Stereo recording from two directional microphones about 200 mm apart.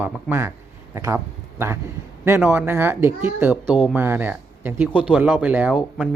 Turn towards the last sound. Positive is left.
turn(degrees=-5)  # may be behind; listen again after turning